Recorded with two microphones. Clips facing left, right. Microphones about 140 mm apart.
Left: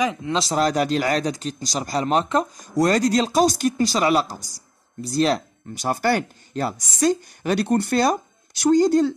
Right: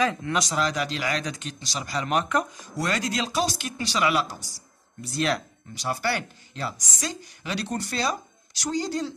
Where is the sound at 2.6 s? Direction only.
45° left (ahead or behind).